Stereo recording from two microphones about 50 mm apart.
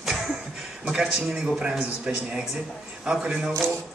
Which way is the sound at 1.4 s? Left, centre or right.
Centre.